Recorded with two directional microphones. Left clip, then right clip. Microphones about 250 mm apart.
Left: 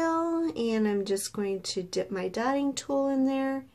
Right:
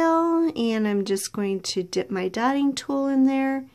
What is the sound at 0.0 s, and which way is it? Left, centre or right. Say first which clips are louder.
Speech: right 7 dB; right.